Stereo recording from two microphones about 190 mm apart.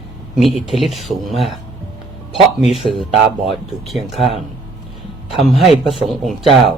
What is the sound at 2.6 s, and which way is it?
Speech, centre (ahead or behind).